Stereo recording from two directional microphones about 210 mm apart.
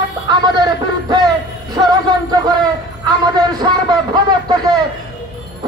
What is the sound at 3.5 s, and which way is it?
Speech, 20° right (ahead or behind).